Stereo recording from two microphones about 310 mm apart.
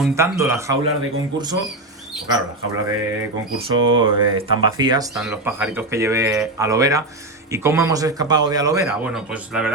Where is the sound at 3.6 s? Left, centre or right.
Centre.